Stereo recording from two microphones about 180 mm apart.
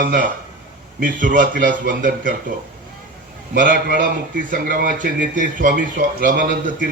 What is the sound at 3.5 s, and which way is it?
A man's voice, 50° right (ahead or behind).